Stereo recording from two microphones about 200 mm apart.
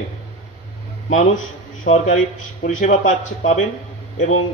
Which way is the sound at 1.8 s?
35° left (ahead or behind).